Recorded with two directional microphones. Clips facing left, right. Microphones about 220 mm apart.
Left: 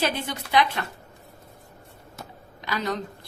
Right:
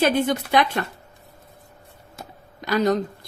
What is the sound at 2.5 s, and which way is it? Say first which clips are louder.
Speech: right 9 dB; 45° right (ahead or behind).